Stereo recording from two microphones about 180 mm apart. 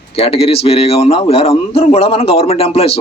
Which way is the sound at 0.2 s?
30° left (ahead or behind).